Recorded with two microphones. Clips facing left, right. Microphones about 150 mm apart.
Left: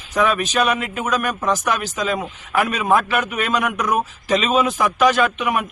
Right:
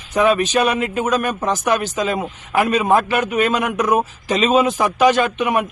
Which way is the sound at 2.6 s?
30° right (ahead or behind).